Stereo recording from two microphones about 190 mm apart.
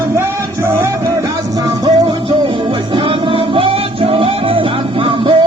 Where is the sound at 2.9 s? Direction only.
25° right (ahead or behind).